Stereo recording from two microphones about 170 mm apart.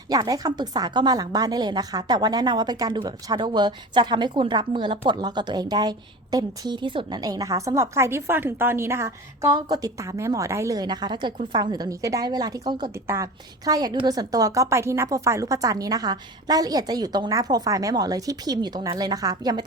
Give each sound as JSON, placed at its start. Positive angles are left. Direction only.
{"t": 0.1, "sound": "speech", "side_deg": -20}